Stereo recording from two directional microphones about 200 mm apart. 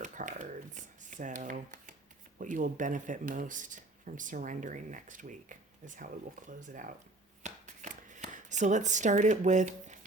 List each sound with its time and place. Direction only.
0.0 s shuffling cards: 40° right (ahead or behind)
2.4 s speech: 40° right (ahead or behind)
7.4 s shuffling cards: 40° right (ahead or behind)